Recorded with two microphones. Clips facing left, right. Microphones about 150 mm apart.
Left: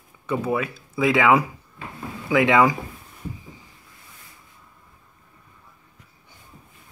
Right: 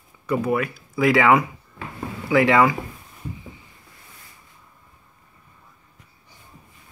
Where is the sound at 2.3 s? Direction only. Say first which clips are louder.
Right 1 dB; 15° left (ahead or behind).